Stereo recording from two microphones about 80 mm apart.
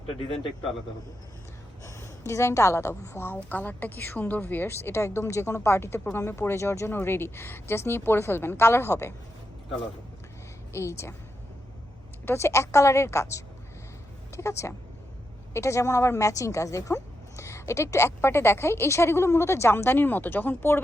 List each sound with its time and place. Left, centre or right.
1.8 s a woman's voice: left
10.7 s a woman's voice: left
12.2 s a woman's voice: left